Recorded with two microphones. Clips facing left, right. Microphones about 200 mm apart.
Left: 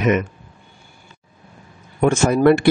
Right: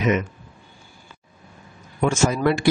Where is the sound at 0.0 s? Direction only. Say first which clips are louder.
Left 3 dB; 60° left (ahead or behind).